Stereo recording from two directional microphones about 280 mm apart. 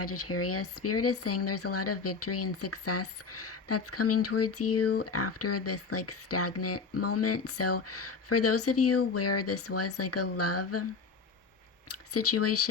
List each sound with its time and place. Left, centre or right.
0.0 s speech: left
11.9 s speech: left